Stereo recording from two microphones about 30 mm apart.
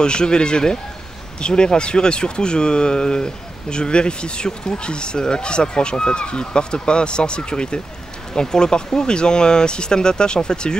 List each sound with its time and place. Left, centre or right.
0.0 s speech: left